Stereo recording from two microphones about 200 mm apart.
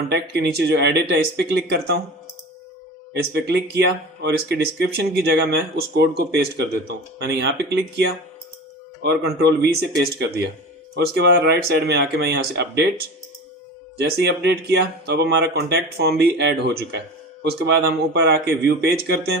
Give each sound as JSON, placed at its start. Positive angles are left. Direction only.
{"t": 0.1, "sound": "speech", "side_deg": -55}
{"t": 3.1, "sound": "speech", "side_deg": -55}